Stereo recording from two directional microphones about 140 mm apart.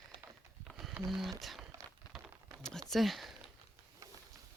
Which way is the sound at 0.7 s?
10° left (ahead or behind).